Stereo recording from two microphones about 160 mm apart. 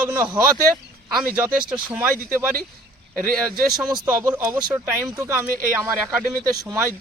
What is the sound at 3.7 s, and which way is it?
Speech, 5° right (ahead or behind).